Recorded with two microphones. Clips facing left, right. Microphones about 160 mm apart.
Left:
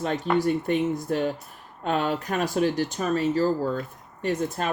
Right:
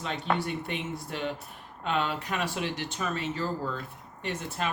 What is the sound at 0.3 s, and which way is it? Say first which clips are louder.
Speech: left 10 dB; 40° left (ahead or behind).